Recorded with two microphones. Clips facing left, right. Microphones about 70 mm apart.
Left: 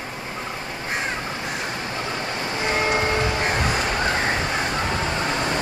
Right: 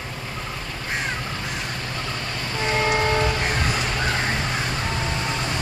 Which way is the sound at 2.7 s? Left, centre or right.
Left.